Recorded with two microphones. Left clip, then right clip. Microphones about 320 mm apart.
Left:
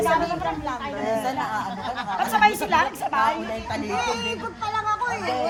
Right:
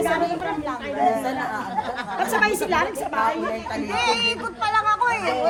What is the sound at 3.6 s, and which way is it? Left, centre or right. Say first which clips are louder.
Speech: right 3 dB; left.